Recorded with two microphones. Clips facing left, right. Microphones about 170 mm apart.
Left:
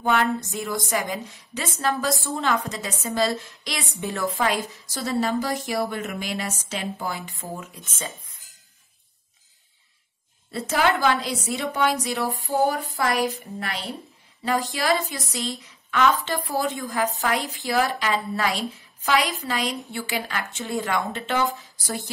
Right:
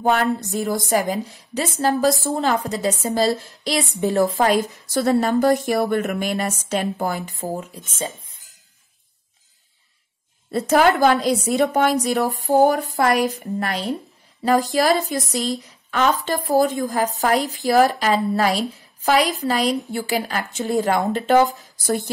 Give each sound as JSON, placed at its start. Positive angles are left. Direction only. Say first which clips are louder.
{"t": 0.0, "sound": "speech", "louder": "right 3 dB", "side_deg": -40}
{"t": 4.8, "sound": "a woman's voice", "louder": "right 6 dB", "side_deg": -55}
{"t": 10.5, "sound": "a woman's voice", "louder": "right 6 dB", "side_deg": -45}
{"t": 21.8, "sound": "a woman's voice", "louder": "right 9 dB", "side_deg": -50}